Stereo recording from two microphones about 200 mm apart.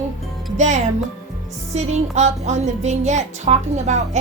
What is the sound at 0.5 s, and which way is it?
A woman's voice, 35° right (ahead or behind).